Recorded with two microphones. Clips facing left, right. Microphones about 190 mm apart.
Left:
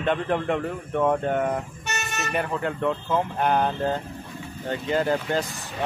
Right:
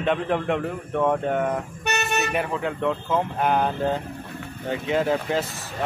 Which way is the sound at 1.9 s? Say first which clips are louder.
Right 9 dB; 65° right (ahead or behind).